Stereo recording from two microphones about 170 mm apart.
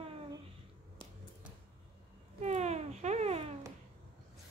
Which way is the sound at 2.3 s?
40° right (ahead or behind).